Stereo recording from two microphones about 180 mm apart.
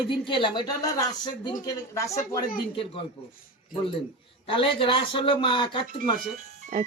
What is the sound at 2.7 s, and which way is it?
Speech, 30° left (ahead or behind).